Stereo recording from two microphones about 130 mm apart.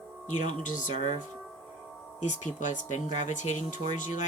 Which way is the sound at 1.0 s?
70° left (ahead or behind).